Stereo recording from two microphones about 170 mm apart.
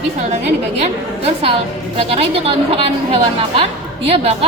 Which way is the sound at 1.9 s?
35° right (ahead or behind).